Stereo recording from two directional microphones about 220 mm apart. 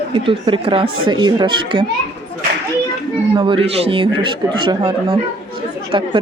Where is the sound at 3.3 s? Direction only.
25° right (ahead or behind).